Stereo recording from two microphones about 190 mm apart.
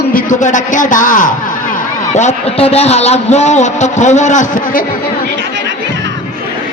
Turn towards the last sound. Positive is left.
turn(degrees=45)  # may be behind; listen again after turning